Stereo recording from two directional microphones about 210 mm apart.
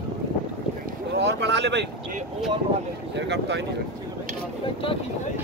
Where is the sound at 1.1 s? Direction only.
55° right (ahead or behind).